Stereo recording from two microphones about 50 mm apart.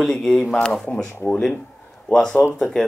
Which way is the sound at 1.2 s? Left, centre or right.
Left.